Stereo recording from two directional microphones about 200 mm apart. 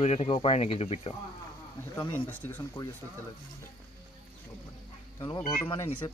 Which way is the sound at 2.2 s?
10° left (ahead or behind).